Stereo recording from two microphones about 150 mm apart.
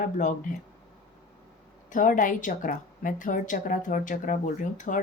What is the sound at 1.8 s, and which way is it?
Speech, 60° left (ahead or behind).